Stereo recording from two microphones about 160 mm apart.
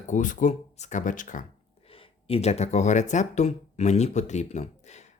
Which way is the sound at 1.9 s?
35° left (ahead or behind).